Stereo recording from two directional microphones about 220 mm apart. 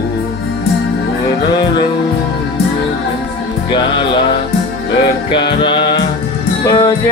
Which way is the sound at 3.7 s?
20° left (ahead or behind).